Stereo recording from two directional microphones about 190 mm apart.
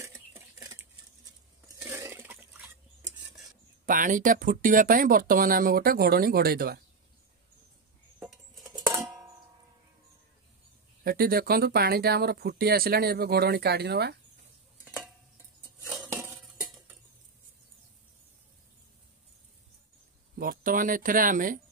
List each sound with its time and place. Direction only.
0.0 s a sound: 15° right (ahead or behind)
3.8 s speech: 45° right (ahead or behind)
8.2 s music: centre (ahead or behind)
8.7 s music: 15° right (ahead or behind)
11.1 s speech: 50° right (ahead or behind)
16.2 s cutlery: centre (ahead or behind)
20.3 s speech: 50° right (ahead or behind)